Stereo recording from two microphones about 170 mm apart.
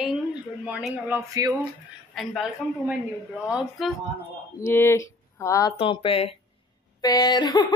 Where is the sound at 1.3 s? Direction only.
20° right (ahead or behind).